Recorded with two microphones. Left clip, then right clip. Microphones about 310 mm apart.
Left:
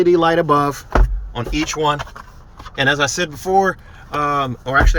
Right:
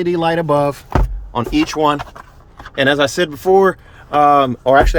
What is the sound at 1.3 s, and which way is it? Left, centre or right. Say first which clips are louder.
Speech: right 5 dB; centre.